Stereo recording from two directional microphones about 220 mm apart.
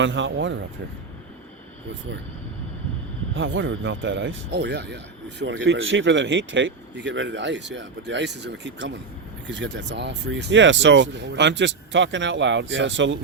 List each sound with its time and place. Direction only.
0.0 s speech: 55° right (ahead or behind)
3.3 s speech: 55° right (ahead or behind)